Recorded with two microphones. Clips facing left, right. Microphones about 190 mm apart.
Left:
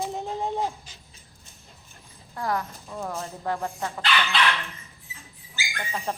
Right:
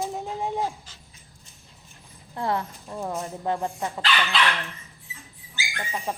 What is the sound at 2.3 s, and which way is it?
Speech, 25° right (ahead or behind).